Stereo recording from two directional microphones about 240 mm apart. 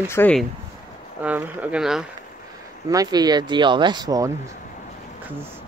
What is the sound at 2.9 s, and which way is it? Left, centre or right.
Speech, centre.